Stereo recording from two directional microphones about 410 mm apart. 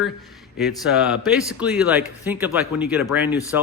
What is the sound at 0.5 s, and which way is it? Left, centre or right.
Speech, centre.